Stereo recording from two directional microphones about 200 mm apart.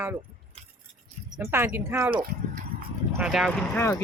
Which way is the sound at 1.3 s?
10° right (ahead or behind).